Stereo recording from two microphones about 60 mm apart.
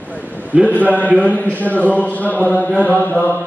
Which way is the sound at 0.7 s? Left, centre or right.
Left.